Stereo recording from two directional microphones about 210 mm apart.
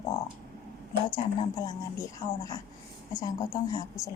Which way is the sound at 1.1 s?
20° left (ahead or behind).